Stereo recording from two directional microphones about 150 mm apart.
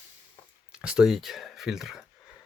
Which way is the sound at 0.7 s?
5° right (ahead or behind).